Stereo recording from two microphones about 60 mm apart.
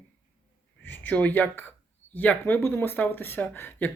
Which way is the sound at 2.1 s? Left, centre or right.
Left.